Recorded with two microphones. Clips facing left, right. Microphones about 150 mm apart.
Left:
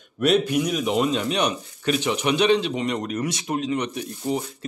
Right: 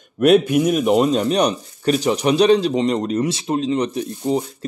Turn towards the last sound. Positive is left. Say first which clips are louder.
# right 6 dB
turn(degrees=-35)  # may be behind; listen again after turning